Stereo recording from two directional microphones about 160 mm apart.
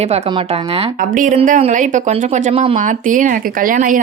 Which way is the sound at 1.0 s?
55° right (ahead or behind).